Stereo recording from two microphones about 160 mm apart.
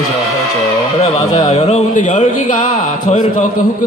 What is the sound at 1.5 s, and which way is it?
A man's voice, 45° left (ahead or behind).